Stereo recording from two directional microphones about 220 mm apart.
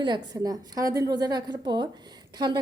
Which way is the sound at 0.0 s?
20° right (ahead or behind).